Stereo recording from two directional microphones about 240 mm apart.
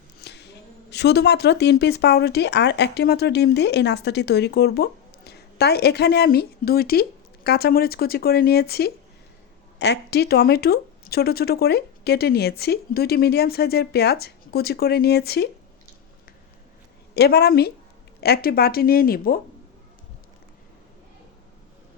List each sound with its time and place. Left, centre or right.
0.2 s a sound: left
0.9 s speech: left
17.2 s speech: left